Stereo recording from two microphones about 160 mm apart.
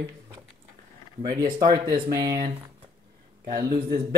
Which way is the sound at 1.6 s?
25° right (ahead or behind).